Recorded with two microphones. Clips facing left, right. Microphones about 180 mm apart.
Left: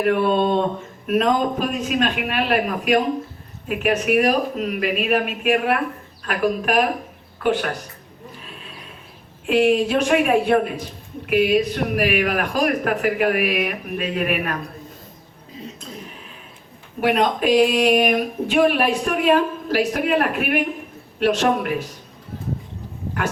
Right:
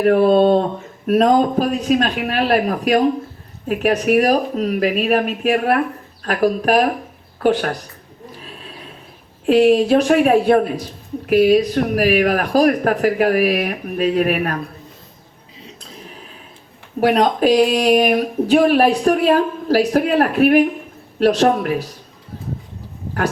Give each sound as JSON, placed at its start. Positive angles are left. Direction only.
{"t": 0.0, "sound": "speech", "side_deg": -40}
{"t": 9.5, "sound": "speech", "side_deg": -35}
{"t": 17.0, "sound": "speech", "side_deg": -35}